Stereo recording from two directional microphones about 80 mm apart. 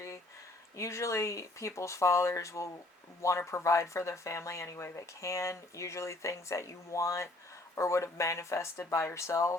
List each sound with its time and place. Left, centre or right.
0.8 s speech: left